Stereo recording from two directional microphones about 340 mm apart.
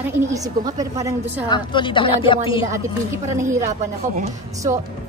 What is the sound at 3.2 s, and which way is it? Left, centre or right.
Speech, centre.